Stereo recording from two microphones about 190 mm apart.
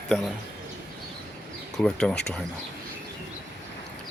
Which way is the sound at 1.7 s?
5° left (ahead or behind).